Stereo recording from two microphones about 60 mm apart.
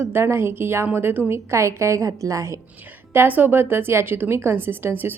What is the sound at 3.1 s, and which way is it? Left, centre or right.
Speech, right.